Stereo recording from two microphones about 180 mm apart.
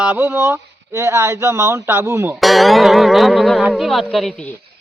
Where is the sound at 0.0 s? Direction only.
10° right (ahead or behind).